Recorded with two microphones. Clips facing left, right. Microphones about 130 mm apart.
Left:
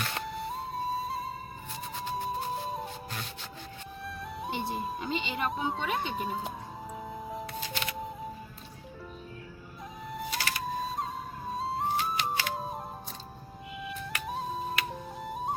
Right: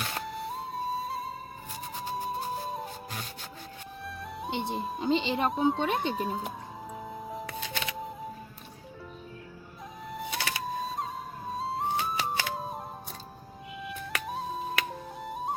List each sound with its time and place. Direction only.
0.1 s music: centre (ahead or behind)
4.0 s music: centre (ahead or behind)
4.9 s speech: 30° right (ahead or behind)
5.5 s speech: centre (ahead or behind)
6.9 s music: centre (ahead or behind)
10.1 s music: centre (ahead or behind)
13.8 s music: centre (ahead or behind)